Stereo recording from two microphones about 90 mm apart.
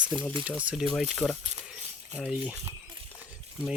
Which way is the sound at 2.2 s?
10° right (ahead or behind).